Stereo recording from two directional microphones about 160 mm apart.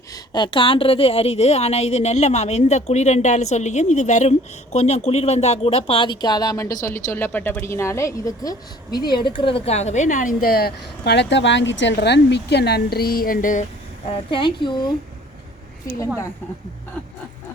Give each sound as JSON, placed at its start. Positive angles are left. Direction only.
{"t": 0.1, "sound": "a woman's voice", "side_deg": 30}
{"t": 14.3, "sound": "a woman's voice", "side_deg": 30}